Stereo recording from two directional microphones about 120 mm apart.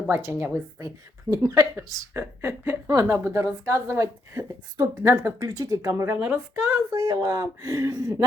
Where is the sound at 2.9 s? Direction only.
30° right (ahead or behind).